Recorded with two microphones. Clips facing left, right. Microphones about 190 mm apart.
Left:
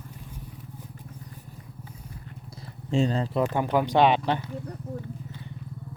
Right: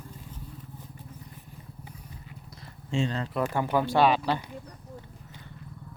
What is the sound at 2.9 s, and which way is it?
Speech, 35° left (ahead or behind).